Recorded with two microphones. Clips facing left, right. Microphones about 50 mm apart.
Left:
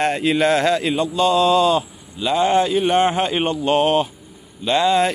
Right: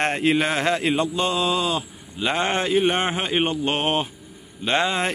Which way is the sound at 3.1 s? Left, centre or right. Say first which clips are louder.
Left 3 dB; centre.